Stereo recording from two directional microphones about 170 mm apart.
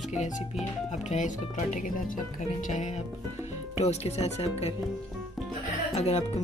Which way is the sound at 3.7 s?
40° left (ahead or behind).